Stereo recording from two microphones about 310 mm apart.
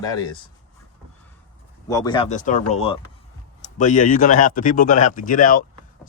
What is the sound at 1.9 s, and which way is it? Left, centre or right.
Speech, centre.